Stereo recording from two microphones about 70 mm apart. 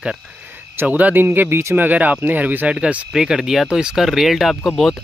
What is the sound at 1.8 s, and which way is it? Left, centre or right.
Speech, right.